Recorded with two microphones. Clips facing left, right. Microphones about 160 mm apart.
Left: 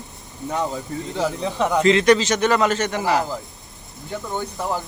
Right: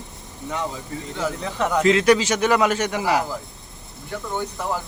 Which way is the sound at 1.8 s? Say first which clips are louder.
Left 1 dB; 5° right (ahead or behind).